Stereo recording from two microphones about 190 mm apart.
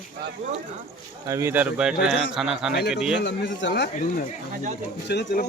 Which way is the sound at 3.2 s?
65° left (ahead or behind).